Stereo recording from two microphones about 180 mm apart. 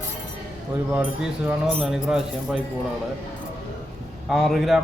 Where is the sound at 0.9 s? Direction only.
5° right (ahead or behind).